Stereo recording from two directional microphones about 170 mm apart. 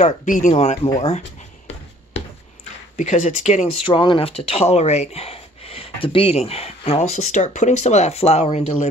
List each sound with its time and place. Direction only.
0.0 s speech: 50° left (ahead or behind)
3.0 s speech: 45° left (ahead or behind)
3.8 s speech: 30° left (ahead or behind)